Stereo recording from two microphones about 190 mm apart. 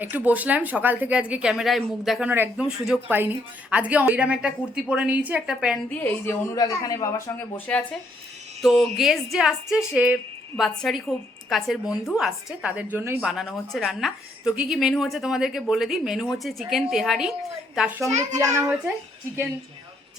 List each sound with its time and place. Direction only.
0.0 s a woman's voice: 10° right (ahead or behind)
6.0 s speech: 10° left (ahead or behind)
7.7 s a woman's voice: 5° left (ahead or behind)
18.1 s a child's voice: 40° right (ahead or behind)
18.3 s a woman's voice: 15° right (ahead or behind)